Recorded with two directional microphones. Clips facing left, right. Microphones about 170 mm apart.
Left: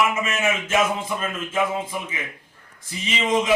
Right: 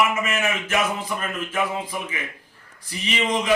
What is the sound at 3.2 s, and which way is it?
Speech, 20° left (ahead or behind).